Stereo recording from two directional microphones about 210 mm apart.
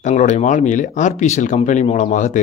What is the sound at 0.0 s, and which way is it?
Speech, 35° left (ahead or behind).